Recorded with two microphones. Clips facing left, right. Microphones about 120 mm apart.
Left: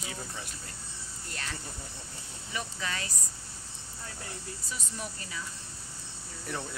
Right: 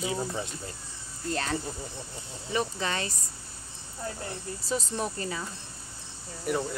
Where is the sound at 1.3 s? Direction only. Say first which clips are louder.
Right 11 dB; 40° right (ahead or behind).